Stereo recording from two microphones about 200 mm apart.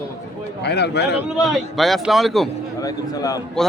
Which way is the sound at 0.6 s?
55° left (ahead or behind).